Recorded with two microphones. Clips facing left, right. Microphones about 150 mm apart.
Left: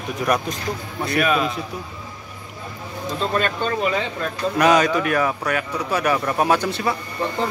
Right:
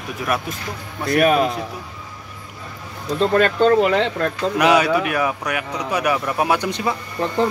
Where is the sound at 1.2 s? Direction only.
50° right (ahead or behind).